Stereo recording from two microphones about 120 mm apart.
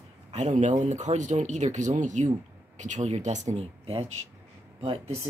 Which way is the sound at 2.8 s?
75° right (ahead or behind).